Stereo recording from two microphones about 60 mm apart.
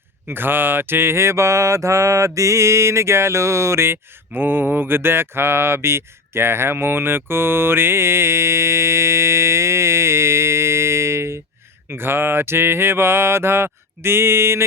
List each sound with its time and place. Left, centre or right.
0.3 s speech: right
4.4 s speech: right